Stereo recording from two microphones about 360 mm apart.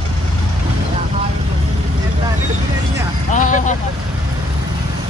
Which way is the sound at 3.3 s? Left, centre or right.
Left.